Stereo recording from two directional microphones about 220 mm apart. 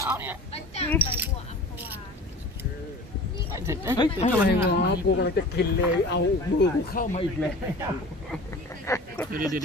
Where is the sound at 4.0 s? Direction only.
30° left (ahead or behind).